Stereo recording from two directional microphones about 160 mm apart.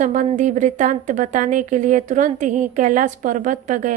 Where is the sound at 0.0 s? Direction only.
50° right (ahead or behind).